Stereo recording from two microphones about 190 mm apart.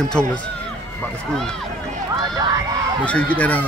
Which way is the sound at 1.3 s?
5° left (ahead or behind).